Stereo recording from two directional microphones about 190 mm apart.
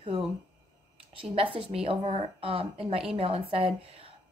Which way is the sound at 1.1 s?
30° right (ahead or behind).